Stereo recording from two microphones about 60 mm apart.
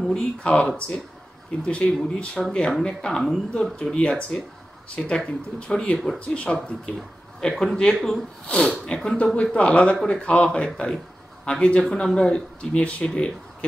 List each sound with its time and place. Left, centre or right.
0.1 s speech: centre